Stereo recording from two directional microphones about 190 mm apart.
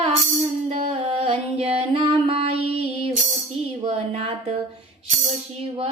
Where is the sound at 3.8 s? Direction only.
30° right (ahead or behind).